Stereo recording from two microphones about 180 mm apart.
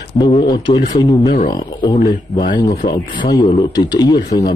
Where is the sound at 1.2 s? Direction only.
45° left (ahead or behind).